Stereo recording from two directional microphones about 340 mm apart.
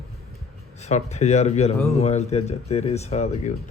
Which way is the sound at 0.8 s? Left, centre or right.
Centre.